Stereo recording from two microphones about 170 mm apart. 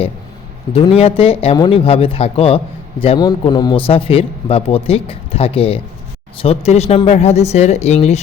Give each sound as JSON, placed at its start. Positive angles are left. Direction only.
{"t": 0.9, "sound": "a man's voice", "side_deg": 35}